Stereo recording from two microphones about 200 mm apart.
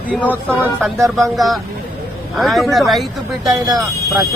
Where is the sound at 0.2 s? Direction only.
5° left (ahead or behind).